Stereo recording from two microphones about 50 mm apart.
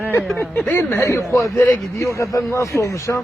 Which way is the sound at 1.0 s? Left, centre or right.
Left.